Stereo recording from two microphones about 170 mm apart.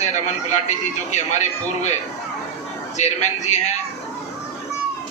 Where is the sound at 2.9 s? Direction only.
45° left (ahead or behind).